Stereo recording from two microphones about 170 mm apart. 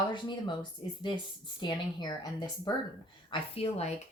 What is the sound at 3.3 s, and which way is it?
Speech, 35° left (ahead or behind).